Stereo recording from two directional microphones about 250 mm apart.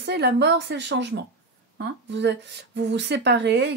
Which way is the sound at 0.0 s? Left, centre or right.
Right.